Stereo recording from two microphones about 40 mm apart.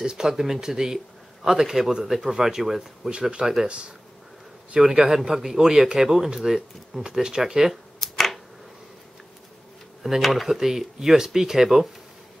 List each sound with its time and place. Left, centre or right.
0.0 s speech: centre
3.1 s speech: right
4.7 s speech: centre
8.0 s a sound: centre
10.0 s speech: centre